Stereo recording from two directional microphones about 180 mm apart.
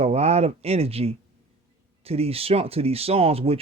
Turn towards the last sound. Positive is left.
turn(degrees=-35)  # may be behind; listen again after turning